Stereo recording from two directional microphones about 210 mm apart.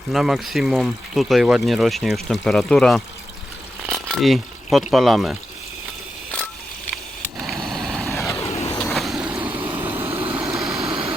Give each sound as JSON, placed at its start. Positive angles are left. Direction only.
{"t": 0.1, "sound": "speech", "side_deg": 0}
{"t": 6.9, "sound": "a sound", "side_deg": 0}
{"t": 8.4, "sound": "vehicle", "side_deg": 30}
{"t": 8.7, "sound": "vehicle", "side_deg": 0}
{"t": 9.6, "sound": "vehicle", "side_deg": -25}
{"t": 10.3, "sound": "vehicle", "side_deg": 0}